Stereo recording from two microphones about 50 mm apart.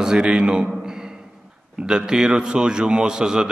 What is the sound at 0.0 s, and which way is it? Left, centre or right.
Speech, centre.